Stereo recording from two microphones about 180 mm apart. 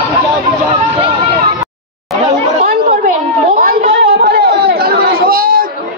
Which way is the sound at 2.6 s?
50° right (ahead or behind).